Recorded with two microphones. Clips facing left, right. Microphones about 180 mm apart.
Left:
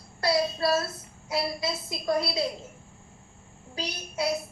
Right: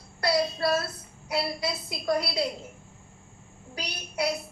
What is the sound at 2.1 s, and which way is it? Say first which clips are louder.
Speech: even; 25° left (ahead or behind).